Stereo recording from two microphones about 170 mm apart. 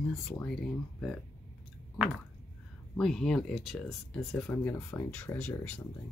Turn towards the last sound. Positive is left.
turn(degrees=5)  # may be behind; listen again after turning